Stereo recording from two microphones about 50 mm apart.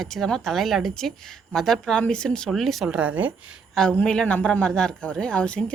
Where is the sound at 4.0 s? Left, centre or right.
Left.